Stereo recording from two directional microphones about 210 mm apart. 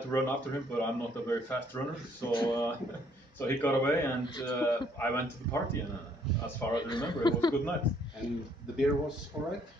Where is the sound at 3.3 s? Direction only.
10° left (ahead or behind).